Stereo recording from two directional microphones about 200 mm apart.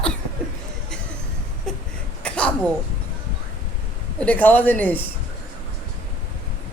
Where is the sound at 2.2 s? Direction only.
5° left (ahead or behind).